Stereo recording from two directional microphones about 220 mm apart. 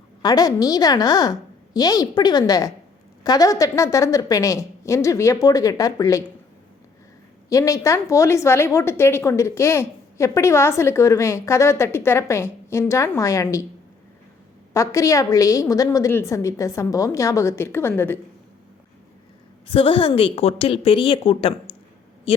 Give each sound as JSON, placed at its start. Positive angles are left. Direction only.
{"t": 0.2, "sound": "a woman's voice", "side_deg": 15}
{"t": 7.5, "sound": "a woman's voice", "side_deg": 15}
{"t": 14.7, "sound": "a woman's voice", "side_deg": 15}
{"t": 19.7, "sound": "a woman's voice", "side_deg": 25}